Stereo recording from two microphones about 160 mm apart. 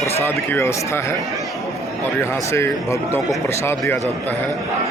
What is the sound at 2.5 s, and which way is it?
Speech, 15° left (ahead or behind).